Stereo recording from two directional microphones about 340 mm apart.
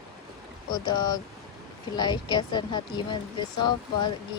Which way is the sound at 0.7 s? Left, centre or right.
Centre.